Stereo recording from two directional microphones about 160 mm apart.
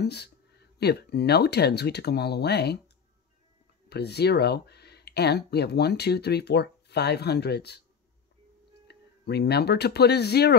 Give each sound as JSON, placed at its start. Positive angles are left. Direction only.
{"t": 0.0, "sound": "speech", "side_deg": 90}
{"t": 3.9, "sound": "speech", "side_deg": 90}
{"t": 8.8, "sound": "speech", "side_deg": 90}